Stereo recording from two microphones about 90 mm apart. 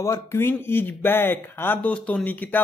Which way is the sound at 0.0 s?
30° left (ahead or behind).